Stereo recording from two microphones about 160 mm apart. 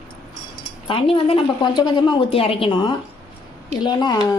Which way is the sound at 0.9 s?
35° left (ahead or behind).